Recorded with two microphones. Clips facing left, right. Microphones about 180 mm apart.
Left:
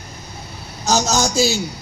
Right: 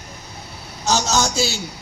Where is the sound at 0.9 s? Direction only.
40° left (ahead or behind).